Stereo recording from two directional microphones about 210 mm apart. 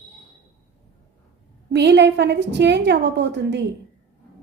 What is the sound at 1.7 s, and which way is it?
A woman's voice, 55° right (ahead or behind).